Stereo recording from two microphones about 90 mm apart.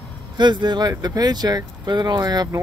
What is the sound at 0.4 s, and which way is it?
Speech, 55° right (ahead or behind).